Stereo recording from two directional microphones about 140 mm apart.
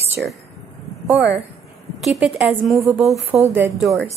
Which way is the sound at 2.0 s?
Centre (ahead or behind).